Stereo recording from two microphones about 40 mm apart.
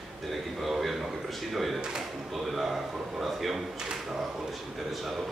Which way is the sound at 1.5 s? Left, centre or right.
Centre.